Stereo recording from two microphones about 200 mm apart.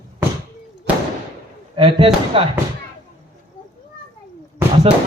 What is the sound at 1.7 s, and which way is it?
Speech, 25° right (ahead or behind).